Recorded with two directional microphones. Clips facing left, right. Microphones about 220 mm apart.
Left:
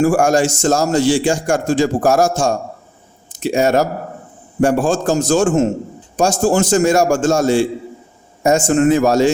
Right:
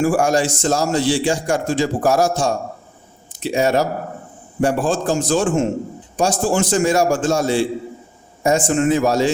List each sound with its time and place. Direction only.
0.0 s a man's voice: 45° left (ahead or behind)